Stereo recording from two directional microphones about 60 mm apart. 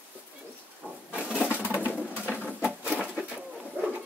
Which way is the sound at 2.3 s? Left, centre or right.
Right.